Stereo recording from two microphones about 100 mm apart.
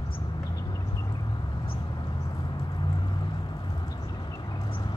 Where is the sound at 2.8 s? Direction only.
50° left (ahead or behind).